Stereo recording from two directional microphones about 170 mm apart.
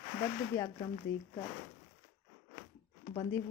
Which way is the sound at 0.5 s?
20° left (ahead or behind).